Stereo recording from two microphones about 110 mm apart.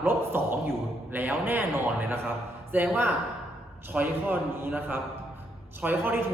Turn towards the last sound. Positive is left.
turn(degrees=-20)  # may be behind; listen again after turning